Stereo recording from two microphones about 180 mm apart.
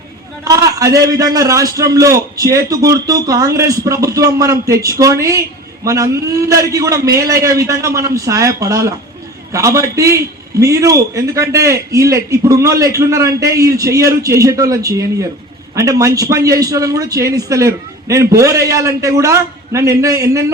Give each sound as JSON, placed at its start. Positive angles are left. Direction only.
{"t": 0.4, "sound": "a man's voice", "side_deg": -20}